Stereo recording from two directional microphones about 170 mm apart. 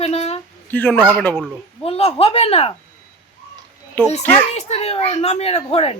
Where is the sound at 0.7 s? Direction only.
10° left (ahead or behind).